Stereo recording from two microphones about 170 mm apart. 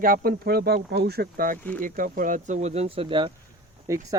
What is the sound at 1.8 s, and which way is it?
Speech, 55° right (ahead or behind).